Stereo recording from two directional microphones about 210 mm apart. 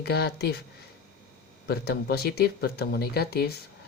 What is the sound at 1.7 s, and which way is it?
Speech, 50° left (ahead or behind).